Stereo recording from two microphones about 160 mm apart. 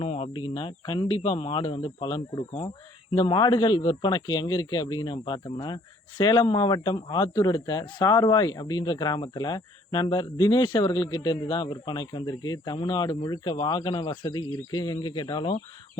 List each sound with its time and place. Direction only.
0.0 s a man's voice: 40° left (ahead or behind)